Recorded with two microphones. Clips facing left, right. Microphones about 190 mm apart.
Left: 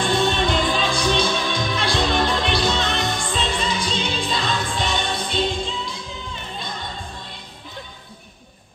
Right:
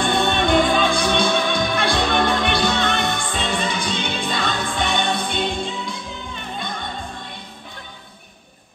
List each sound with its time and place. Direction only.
0.1 s music: 55° right (ahead or behind)